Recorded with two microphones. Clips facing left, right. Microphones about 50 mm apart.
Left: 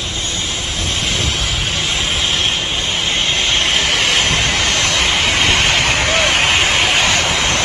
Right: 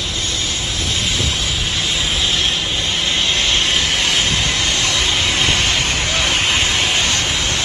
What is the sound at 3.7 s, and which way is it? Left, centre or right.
Vehicle, left.